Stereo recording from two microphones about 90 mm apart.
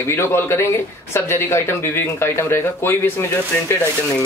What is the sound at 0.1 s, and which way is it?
Speech, 30° left (ahead or behind).